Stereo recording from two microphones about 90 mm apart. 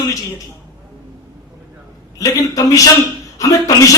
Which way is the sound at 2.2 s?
40° left (ahead or behind).